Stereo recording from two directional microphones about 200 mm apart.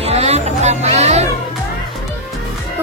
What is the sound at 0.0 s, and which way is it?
Music, 30° right (ahead or behind).